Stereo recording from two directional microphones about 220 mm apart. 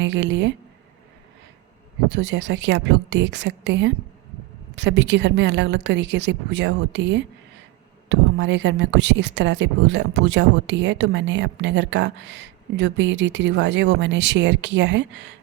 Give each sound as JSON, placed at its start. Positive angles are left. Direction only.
{"t": 0.0, "sound": "a woman's voice", "side_deg": -55}
{"t": 2.1, "sound": "a woman's voice", "side_deg": -55}